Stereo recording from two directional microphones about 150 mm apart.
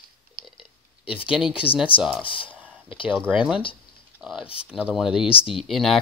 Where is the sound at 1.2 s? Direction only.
5° right (ahead or behind).